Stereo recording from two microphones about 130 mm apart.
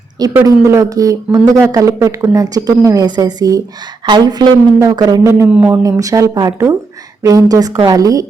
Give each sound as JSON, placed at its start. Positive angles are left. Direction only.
{"t": 0.4, "sound": "speech", "side_deg": -25}
{"t": 5.5, "sound": "speech", "side_deg": -15}
{"t": 5.8, "sound": "speech", "side_deg": -25}